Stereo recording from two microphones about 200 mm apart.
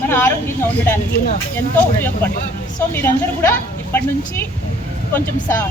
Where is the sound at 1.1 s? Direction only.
45° left (ahead or behind).